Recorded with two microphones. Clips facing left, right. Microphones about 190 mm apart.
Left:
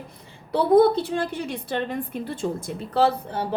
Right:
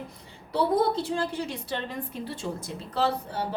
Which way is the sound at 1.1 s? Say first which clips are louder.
Left 3 dB; 60° left (ahead or behind).